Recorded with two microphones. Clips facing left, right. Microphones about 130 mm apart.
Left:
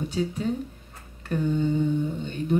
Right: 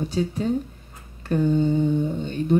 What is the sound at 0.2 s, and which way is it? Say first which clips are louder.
Speech: right 3 dB; 40° right (ahead or behind).